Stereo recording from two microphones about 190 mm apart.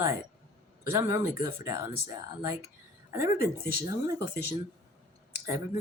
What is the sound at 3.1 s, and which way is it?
Speech, 15° right (ahead or behind).